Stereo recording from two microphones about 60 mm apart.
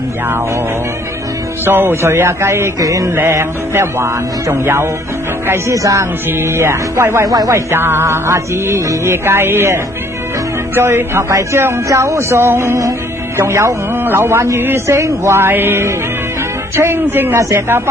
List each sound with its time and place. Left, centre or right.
1.6 s music: right
2.8 s speech: right
3.2 s music: right
5.7 s speech: right
6.3 s music: right
7.2 s speech: right
7.5 s music: right
13.4 s music: right
13.9 s music: right